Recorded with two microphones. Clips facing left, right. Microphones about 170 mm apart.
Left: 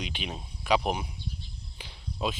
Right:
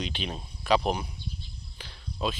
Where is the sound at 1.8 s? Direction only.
15° left (ahead or behind).